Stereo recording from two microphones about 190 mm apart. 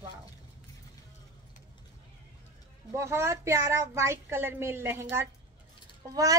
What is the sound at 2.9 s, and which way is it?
A child's voice, 15° right (ahead or behind).